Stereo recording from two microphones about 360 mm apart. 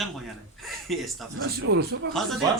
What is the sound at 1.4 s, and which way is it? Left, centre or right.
Speech, right.